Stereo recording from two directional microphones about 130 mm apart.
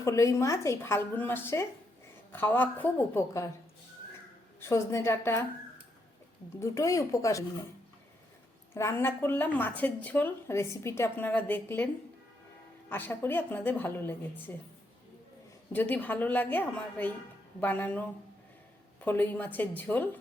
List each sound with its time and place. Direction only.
0.0 s a woman's voice: 25° left (ahead or behind)
4.7 s a woman's voice: 20° left (ahead or behind)
6.6 s a woman's voice: 25° left (ahead or behind)
8.7 s a woman's voice: 20° left (ahead or behind)
12.9 s a woman's voice: 15° left (ahead or behind)
15.7 s a woman's voice: 15° left (ahead or behind)
19.0 s a woman's voice: 15° left (ahead or behind)